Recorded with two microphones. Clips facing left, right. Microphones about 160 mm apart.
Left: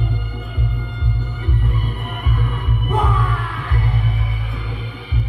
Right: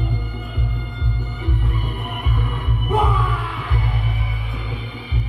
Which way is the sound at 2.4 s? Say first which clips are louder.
Even; 5° right (ahead or behind).